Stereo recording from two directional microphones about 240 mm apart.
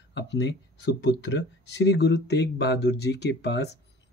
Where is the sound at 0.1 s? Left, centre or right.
Left.